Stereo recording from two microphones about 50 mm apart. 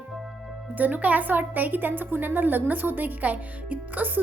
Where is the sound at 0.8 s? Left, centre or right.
Right.